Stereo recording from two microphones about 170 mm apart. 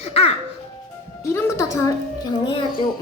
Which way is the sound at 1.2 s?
15° left (ahead or behind).